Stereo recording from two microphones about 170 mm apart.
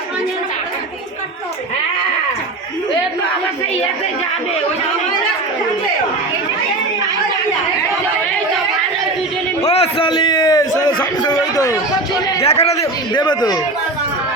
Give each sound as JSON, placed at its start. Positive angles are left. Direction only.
{"t": 9.6, "sound": "a sound", "side_deg": 35}
{"t": 12.4, "sound": "a man's voice", "side_deg": 35}
{"t": 12.7, "sound": "a man's voice", "side_deg": 20}